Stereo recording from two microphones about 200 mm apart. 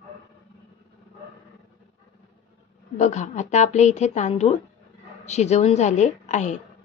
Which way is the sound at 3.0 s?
35° left (ahead or behind).